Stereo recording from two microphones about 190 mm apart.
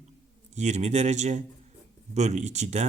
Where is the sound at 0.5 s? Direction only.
35° right (ahead or behind).